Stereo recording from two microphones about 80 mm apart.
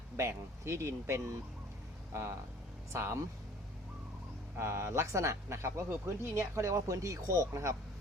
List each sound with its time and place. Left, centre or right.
0.2 s speech: right
4.5 s speech: right